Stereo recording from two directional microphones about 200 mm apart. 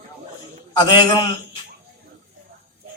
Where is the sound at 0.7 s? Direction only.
20° left (ahead or behind).